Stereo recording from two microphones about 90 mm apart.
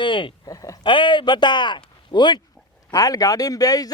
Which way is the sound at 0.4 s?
40° left (ahead or behind).